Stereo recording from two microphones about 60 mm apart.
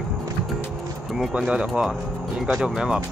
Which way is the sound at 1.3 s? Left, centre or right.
Centre.